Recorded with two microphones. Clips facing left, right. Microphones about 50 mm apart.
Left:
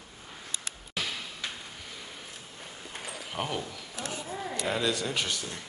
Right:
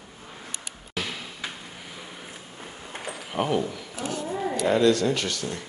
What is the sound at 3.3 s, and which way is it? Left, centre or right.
Speech, centre.